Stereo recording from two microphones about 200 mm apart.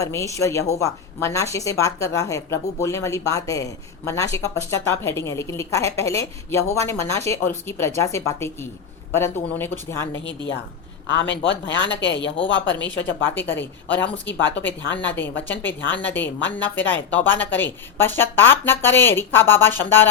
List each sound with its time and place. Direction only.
0.0 s a woman's voice: 15° left (ahead or behind)
11.1 s speech: 65° left (ahead or behind)
13.2 s a woman's voice: 10° left (ahead or behind)